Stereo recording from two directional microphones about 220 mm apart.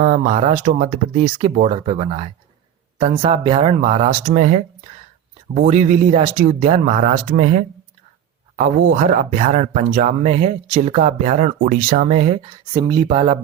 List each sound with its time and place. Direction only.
0.0 s speech: 30° right (ahead or behind)